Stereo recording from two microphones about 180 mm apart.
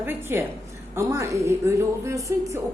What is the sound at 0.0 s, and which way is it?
A woman's voice, 10° right (ahead or behind).